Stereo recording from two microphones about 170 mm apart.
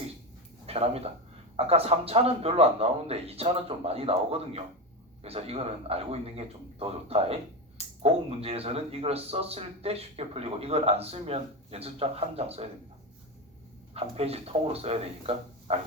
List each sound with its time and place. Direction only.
0.7 s speech: 35° right (ahead or behind)
13.9 s speech: 35° right (ahead or behind)